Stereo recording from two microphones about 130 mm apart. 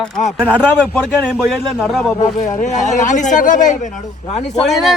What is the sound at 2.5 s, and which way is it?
Speech, 70° left (ahead or behind).